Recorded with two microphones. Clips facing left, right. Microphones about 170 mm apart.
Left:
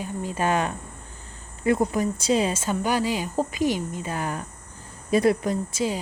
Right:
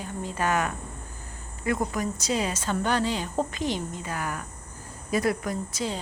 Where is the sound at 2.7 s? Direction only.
10° left (ahead or behind).